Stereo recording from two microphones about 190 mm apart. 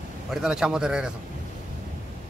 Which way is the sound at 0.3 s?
5° right (ahead or behind).